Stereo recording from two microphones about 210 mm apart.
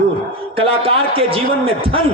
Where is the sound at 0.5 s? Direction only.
25° right (ahead or behind).